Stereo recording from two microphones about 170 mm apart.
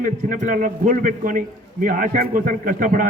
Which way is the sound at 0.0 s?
50° right (ahead or behind).